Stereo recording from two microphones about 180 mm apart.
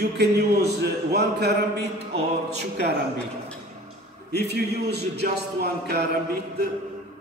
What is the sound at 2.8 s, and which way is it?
Speech, 65° right (ahead or behind).